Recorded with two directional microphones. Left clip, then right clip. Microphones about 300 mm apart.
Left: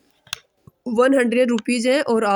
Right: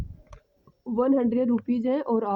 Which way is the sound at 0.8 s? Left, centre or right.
Right.